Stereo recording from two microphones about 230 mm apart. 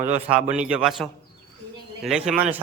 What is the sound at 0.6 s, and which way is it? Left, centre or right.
A man's voice, centre.